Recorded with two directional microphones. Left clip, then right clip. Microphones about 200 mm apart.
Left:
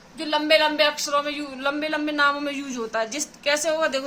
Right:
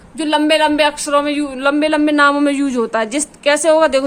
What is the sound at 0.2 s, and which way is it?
A man's voice, 50° right (ahead or behind).